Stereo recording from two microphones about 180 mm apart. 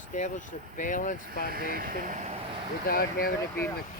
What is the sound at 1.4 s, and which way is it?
Speech, 55° right (ahead or behind).